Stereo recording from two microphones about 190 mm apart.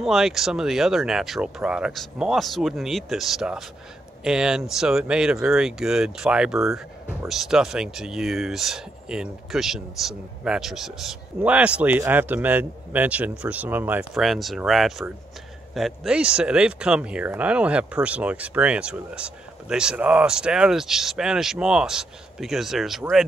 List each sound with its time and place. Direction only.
0.0 s speech: centre (ahead or behind)